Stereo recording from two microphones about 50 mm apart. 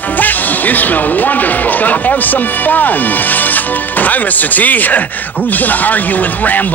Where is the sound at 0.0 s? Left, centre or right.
Left.